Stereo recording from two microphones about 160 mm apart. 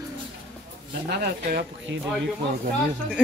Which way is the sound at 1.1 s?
85° right.